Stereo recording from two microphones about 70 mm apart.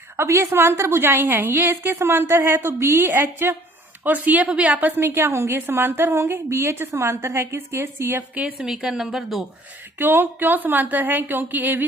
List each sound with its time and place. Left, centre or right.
0.2 s a woman's voice: right; by 4.9 s centre
4.9 s a woman's voice: right
8.5 s speech: centre
10.0 s speech: right